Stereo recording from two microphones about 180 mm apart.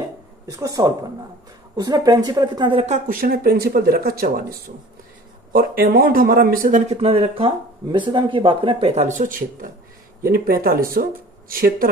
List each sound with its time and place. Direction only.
0.5 s speech: 20° right (ahead or behind)
3.1 s speech: 55° right (ahead or behind)
7.0 s speech: 30° right (ahead or behind); by 11.9 s 55° right (ahead or behind)